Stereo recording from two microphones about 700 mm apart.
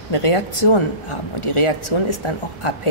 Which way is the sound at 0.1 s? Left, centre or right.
Left.